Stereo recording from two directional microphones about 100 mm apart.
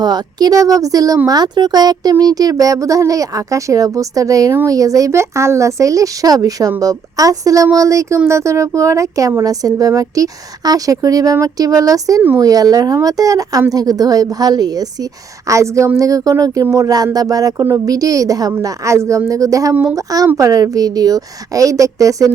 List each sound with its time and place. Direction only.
0.0 s speech: 45° right (ahead or behind)